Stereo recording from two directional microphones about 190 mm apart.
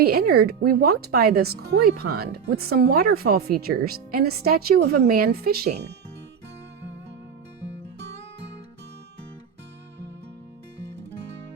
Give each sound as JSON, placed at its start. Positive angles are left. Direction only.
{"t": 0.0, "sound": "speech", "side_deg": -55}